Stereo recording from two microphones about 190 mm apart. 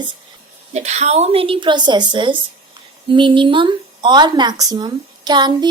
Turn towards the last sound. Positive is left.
turn(degrees=-20)  # may be behind; listen again after turning